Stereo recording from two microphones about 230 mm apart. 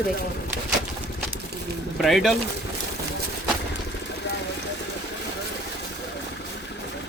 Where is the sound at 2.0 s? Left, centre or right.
Centre.